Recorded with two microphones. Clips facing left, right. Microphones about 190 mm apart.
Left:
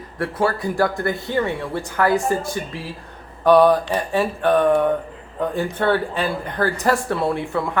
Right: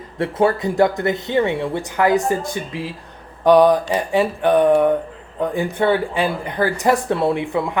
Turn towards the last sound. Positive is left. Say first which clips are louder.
# right 2 dB
turn(degrees=-15)  # may be behind; listen again after turning